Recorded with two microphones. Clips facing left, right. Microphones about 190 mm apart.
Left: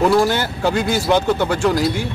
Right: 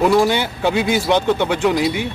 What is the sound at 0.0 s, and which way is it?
Speech, centre (ahead or behind).